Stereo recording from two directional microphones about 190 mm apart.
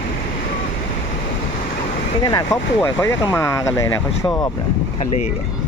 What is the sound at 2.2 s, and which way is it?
Speech, 20° left (ahead or behind).